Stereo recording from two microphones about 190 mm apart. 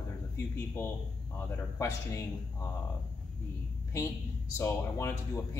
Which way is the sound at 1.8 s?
15° left (ahead or behind).